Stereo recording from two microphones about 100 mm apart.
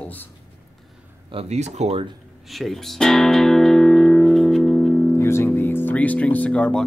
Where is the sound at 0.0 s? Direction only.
15° left (ahead or behind).